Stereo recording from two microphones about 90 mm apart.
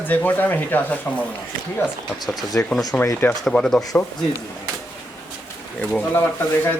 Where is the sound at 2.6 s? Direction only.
25° left (ahead or behind).